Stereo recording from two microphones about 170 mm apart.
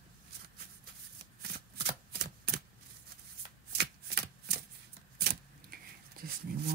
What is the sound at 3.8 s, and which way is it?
Shuffling cards, 70° right (ahead or behind).